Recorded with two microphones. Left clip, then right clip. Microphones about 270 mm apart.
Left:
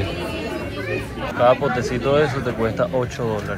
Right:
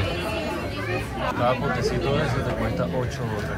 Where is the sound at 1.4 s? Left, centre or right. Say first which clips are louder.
Left 8 dB; centre.